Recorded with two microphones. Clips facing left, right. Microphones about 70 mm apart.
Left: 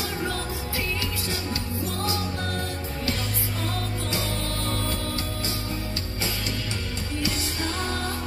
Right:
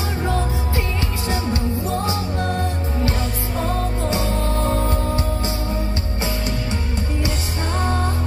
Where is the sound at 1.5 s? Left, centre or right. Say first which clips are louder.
Right 8 dB; right.